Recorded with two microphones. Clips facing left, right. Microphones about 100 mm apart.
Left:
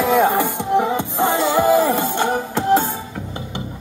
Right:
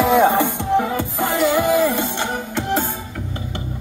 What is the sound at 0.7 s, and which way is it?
Music, 20° left (ahead or behind).